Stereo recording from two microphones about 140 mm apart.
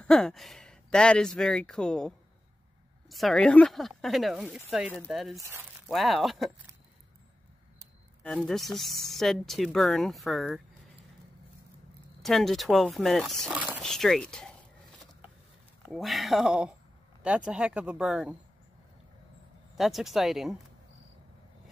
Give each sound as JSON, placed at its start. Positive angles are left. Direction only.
{"t": 0.0, "sound": "speech", "side_deg": 5}
{"t": 5.4, "sound": "speech", "side_deg": -15}
{"t": 5.9, "sound": "speech", "side_deg": 0}
{"t": 8.2, "sound": "speech", "side_deg": 5}
{"t": 12.2, "sound": "speech", "side_deg": 0}
{"t": 13.6, "sound": "a sound", "side_deg": -10}
{"t": 13.8, "sound": "speech", "side_deg": 5}
{"t": 15.9, "sound": "speech", "side_deg": 0}
{"t": 19.7, "sound": "speech", "side_deg": 0}